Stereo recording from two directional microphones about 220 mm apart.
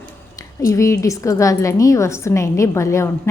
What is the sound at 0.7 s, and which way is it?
A woman's voice, 15° left (ahead or behind).